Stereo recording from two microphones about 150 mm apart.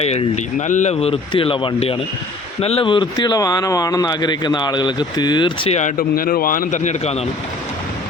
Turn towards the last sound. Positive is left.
turn(degrees=50)  # may be behind; listen again after turning